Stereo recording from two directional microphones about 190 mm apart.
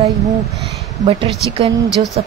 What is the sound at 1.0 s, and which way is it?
A woman's voice, 30° right (ahead or behind).